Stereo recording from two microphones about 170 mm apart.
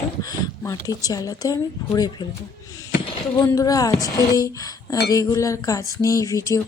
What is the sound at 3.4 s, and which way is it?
Speech, 20° left (ahead or behind).